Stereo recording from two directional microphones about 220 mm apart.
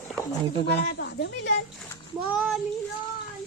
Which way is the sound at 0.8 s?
50° left (ahead or behind).